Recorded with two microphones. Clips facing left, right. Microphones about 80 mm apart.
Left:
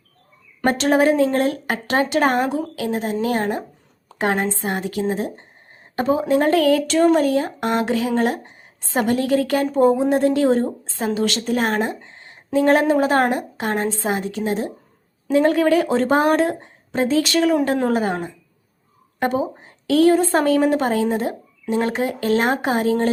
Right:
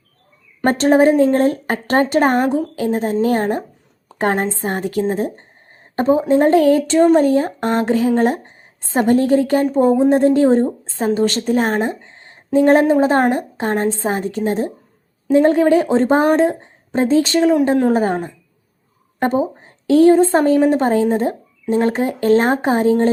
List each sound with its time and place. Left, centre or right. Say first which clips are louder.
0.6 s a woman's voice: right 4 dB; right
15.3 s a woman's voice: right 4 dB; right
19.2 s a woman's voice: right 3 dB; right